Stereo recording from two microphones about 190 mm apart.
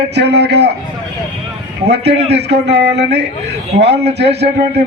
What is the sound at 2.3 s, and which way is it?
Speech, 65° right (ahead or behind).